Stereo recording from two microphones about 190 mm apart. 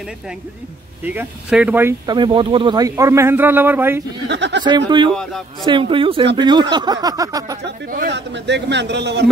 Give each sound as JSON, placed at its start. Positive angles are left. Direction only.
{"t": 1.0, "sound": "a man's voice", "side_deg": -5}
{"t": 2.0, "sound": "a man's voice", "side_deg": -25}
{"t": 4.3, "sound": "speech", "side_deg": -70}
{"t": 4.6, "sound": "speech", "side_deg": -25}
{"t": 5.1, "sound": "speech", "side_deg": 5}
{"t": 5.7, "sound": "speech", "side_deg": -25}
{"t": 8.1, "sound": "a man's voice", "side_deg": -65}